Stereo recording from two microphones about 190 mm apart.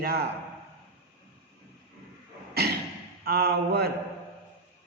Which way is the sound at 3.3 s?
55° right (ahead or behind).